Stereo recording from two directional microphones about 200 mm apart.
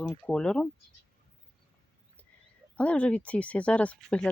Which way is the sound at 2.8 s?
5° left (ahead or behind).